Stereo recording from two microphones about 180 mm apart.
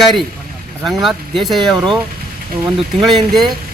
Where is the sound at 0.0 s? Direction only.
Centre (ahead or behind).